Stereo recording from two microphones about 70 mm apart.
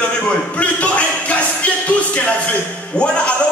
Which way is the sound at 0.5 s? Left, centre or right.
Centre.